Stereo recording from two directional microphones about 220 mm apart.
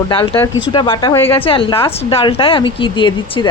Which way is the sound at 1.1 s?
10° left (ahead or behind).